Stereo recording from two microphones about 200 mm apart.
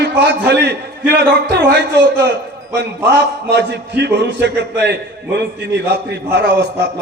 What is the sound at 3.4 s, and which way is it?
A man's voice, 55° right (ahead or behind).